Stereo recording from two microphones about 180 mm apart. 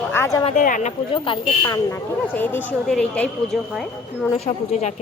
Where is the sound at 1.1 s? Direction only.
30° left (ahead or behind); by 3.6 s 5° left (ahead or behind).